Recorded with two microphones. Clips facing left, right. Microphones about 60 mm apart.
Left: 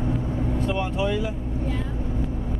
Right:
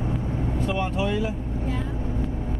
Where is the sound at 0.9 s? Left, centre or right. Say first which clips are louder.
Even; right.